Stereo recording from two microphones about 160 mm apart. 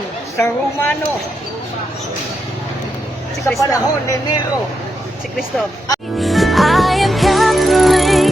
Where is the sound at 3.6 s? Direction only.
20° left (ahead or behind).